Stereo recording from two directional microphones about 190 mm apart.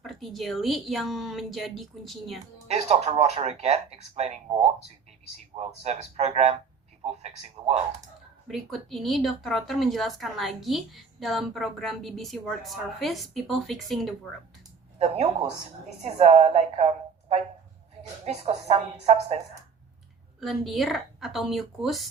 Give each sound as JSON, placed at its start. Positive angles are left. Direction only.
{"t": 0.0, "sound": "speech", "side_deg": 0}
{"t": 2.6, "sound": "speech", "side_deg": -35}
{"t": 5.5, "sound": "speech", "side_deg": -35}
{"t": 8.4, "sound": "speech", "side_deg": 0}
{"t": 14.9, "sound": "speech", "side_deg": -35}
{"t": 20.4, "sound": "speech", "side_deg": 0}